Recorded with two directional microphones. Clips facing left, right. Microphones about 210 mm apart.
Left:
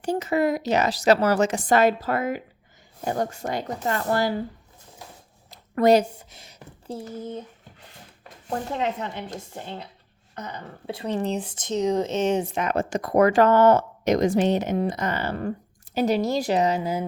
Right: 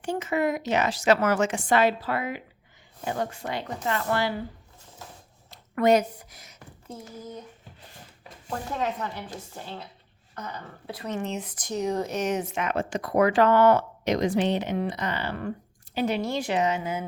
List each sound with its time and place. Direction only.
0.0 s speech: 35° left (ahead or behind)
5.5 s speech: 35° left (ahead or behind)
8.7 s speech: 20° left (ahead or behind)